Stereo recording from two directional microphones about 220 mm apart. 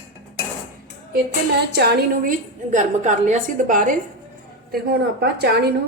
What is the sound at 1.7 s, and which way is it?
Speech, 45° right (ahead or behind).